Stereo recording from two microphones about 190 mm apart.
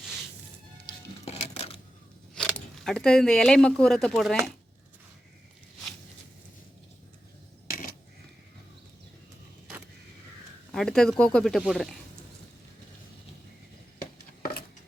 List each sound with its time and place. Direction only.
0.9 s music: 35° left (ahead or behind)
2.3 s speech: 5° left (ahead or behind)
10.7 s speech: centre (ahead or behind)
14.0 s a sound: 50° left (ahead or behind)